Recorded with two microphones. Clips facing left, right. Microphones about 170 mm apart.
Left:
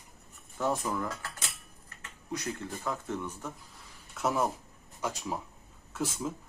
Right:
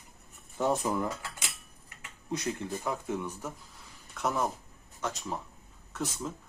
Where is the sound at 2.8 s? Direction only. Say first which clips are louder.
Right 2 dB; 10° right (ahead or behind).